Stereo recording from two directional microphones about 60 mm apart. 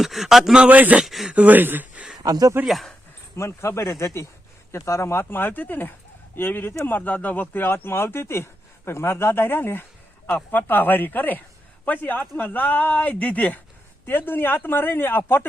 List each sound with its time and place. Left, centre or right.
0.0 s a sound: centre
0.5 s a man's voice: right
1.0 s a sound: centre
1.3 s speech: right
2.2 s speech: right
2.6 s speech: centre
3.3 s speech: left